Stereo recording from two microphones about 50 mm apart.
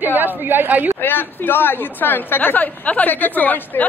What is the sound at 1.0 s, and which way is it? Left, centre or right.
A woman's voice, left.